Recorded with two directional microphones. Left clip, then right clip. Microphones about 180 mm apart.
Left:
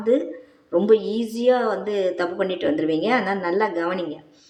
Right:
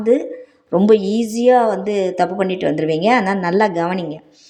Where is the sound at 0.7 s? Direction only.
40° right (ahead or behind).